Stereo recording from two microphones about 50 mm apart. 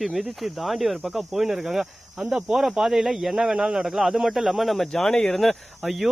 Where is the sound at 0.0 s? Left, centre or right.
Centre.